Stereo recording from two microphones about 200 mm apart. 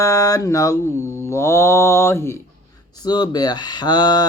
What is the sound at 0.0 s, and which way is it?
Speech, 15° left (ahead or behind).